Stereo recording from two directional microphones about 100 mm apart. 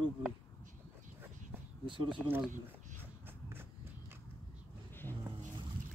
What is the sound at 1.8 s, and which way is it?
Speech, 55° right (ahead or behind).